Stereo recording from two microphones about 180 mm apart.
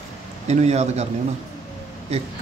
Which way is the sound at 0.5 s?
35° right (ahead or behind).